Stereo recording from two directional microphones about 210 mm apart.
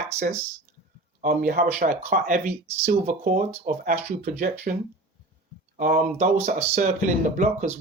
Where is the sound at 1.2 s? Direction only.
40° right (ahead or behind).